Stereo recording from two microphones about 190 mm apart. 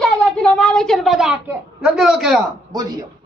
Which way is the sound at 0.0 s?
5° left (ahead or behind).